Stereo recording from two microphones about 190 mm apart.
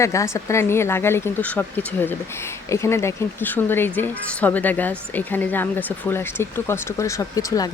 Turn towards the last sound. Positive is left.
turn(degrees=20)  # may be behind; listen again after turning